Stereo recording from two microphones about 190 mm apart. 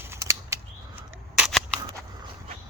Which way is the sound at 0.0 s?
15° right (ahead or behind).